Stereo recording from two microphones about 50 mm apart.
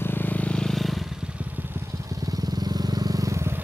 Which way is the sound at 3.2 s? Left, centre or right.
Right.